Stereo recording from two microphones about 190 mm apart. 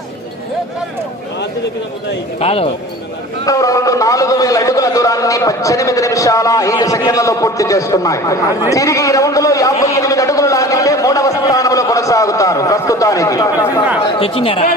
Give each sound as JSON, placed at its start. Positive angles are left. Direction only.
{"t": 2.4, "sound": "speech", "side_deg": 30}
{"t": 3.4, "sound": "a man's voice", "side_deg": 15}
{"t": 14.0, "sound": "speech", "side_deg": 30}